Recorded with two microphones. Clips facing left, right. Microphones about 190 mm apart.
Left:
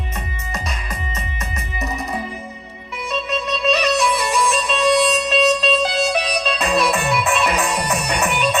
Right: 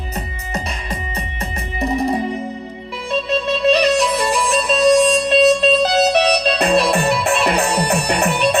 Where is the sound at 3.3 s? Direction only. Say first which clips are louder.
Right 5 dB; 35° right (ahead or behind).